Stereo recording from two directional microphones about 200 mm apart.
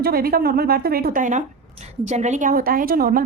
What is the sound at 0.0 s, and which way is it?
Speech, 50° right (ahead or behind).